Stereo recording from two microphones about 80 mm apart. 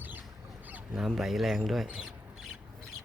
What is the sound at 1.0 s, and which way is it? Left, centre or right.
Speech, centre.